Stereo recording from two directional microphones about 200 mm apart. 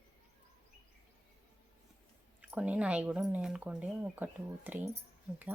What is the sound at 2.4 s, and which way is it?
Speech, 5° right (ahead or behind).